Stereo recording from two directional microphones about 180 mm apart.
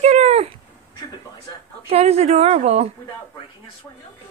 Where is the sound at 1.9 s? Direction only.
35° right (ahead or behind).